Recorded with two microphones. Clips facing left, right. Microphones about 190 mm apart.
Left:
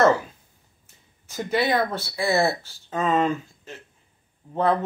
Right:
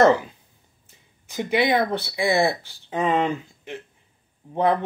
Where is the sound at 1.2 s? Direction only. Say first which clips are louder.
Right 2 dB; 15° right (ahead or behind).